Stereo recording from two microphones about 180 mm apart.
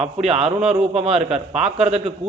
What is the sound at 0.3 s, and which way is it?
A man's voice, 35° right (ahead or behind).